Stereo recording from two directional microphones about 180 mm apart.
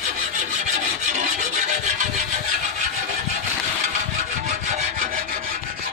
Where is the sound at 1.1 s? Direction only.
40° right (ahead or behind).